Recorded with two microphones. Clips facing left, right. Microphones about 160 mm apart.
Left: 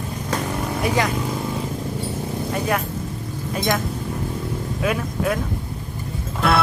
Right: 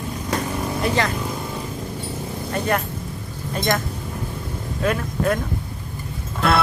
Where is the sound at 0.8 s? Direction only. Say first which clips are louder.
Left 1 dB; 10° left (ahead or behind).